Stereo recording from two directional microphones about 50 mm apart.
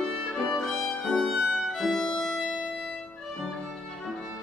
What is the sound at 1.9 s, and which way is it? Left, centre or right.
Violin, centre.